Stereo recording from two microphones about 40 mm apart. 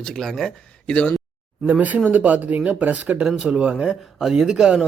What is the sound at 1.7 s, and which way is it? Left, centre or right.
Speech, right.